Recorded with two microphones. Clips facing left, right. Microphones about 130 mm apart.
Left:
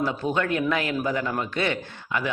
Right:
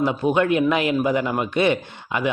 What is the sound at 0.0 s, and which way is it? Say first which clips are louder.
A man's voice: right 6 dB; 15° right (ahead or behind).